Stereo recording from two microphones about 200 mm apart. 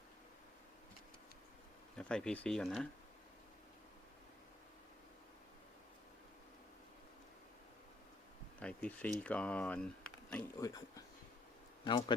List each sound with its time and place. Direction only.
2.0 s speech: 5° left (ahead or behind)
8.6 s speech: 5° left (ahead or behind)
10.6 s a man's voice: 20° left (ahead or behind)